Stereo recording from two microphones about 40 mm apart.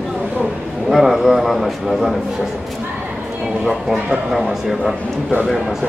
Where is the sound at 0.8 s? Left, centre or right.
Centre.